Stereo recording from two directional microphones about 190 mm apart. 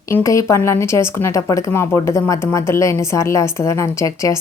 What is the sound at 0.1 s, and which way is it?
A woman's voice, 15° left (ahead or behind).